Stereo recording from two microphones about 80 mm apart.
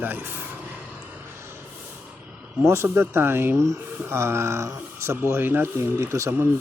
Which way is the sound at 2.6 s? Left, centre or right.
Right.